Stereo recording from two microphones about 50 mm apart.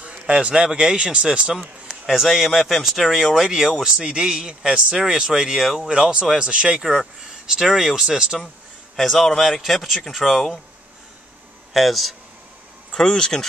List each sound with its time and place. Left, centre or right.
0.0 s a sound: right
0.7 s speech: centre
2.0 s speech: centre
3.4 s speech: centre
8.9 s speech: centre
11.7 s speech: centre
12.9 s speech: centre